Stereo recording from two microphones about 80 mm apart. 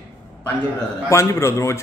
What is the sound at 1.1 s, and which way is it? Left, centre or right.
Speech, left.